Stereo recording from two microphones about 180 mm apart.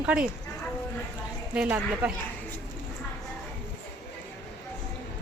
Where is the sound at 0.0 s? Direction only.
5° right (ahead or behind).